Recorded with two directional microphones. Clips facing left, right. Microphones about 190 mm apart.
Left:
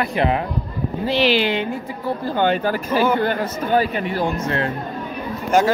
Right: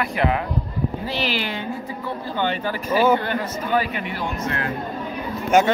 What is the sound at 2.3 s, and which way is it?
Speech, 45° left (ahead or behind).